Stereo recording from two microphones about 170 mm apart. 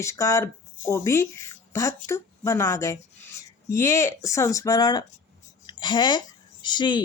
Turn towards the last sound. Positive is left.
turn(degrees=25)  # may be behind; listen again after turning